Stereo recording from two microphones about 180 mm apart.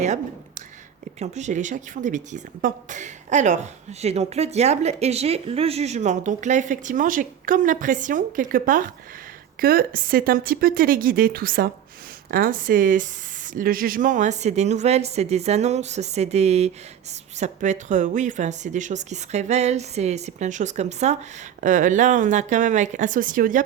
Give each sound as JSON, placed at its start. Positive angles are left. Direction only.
{"t": 1.2, "sound": "a woman's voice", "side_deg": -40}